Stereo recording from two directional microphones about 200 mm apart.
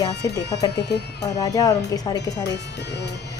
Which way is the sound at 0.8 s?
55° left (ahead or behind).